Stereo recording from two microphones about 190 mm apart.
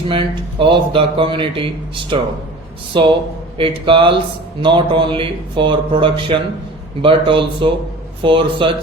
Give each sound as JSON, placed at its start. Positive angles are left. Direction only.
{"t": 0.1, "sound": "a man's voice", "side_deg": -25}